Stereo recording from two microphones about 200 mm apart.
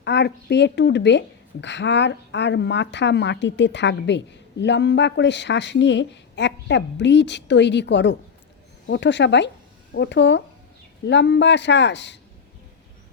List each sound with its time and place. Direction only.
0.0 s a woman's voice: 60° left (ahead or behind)